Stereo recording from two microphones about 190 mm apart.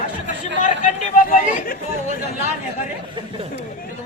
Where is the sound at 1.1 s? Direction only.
45° left (ahead or behind).